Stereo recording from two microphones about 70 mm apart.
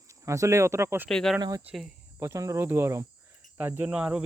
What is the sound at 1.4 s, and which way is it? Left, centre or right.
Speech, right.